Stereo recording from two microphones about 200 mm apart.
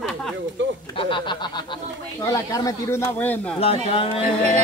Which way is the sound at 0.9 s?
25° left (ahead or behind).